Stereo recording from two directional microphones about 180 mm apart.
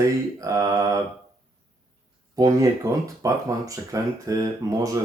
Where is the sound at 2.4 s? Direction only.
15° right (ahead or behind).